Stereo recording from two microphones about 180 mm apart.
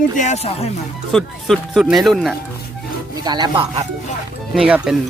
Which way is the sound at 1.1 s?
Centre (ahead or behind).